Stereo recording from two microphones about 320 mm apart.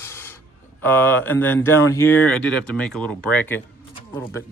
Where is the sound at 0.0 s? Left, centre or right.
Centre.